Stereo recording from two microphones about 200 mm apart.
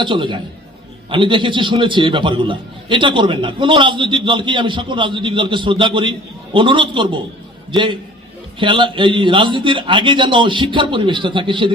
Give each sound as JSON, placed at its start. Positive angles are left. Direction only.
{"t": 0.0, "sound": "a man's voice", "side_deg": -25}
{"t": 8.5, "sound": "a man's voice", "side_deg": -25}